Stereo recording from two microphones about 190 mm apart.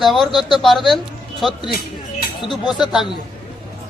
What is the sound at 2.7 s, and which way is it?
Speech, 5° right (ahead or behind).